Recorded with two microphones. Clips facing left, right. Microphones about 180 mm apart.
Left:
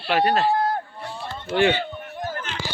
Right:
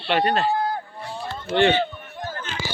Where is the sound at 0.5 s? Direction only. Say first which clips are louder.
Left 2 dB; 65° left (ahead or behind).